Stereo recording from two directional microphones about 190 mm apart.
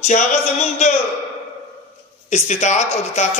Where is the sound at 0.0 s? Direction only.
40° left (ahead or behind).